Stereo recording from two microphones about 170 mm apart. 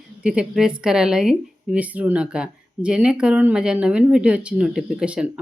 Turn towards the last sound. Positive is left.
turn(degrees=-5)  # may be behind; listen again after turning